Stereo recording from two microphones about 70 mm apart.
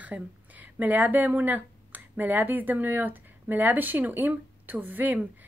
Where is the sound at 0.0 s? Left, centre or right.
Right.